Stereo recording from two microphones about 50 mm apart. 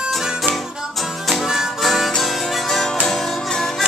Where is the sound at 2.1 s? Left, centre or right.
Centre.